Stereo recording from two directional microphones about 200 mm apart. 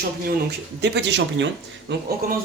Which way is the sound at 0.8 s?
60° right (ahead or behind).